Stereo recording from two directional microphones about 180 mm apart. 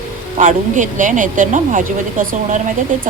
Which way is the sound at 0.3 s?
45° right (ahead or behind).